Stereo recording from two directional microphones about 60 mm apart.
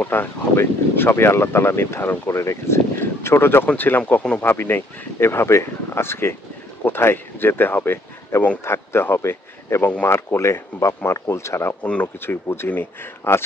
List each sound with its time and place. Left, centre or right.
0.0 s speech: left
11.8 s speech: left
12.2 s speech: left